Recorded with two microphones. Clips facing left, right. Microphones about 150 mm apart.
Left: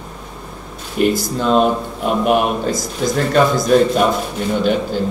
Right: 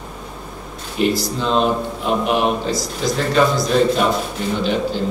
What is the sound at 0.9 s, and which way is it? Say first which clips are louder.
A man's voice: left 2 dB; 50° left (ahead or behind).